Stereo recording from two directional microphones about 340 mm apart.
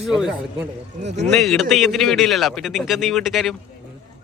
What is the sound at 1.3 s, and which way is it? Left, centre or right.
Speech, centre.